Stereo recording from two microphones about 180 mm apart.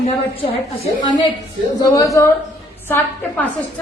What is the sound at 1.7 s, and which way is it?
A woman's voice, 20° left (ahead or behind).